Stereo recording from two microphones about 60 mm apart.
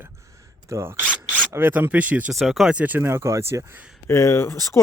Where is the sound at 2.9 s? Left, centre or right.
Right.